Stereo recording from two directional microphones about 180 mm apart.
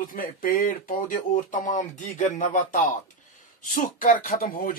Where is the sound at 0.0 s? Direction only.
50° left (ahead or behind).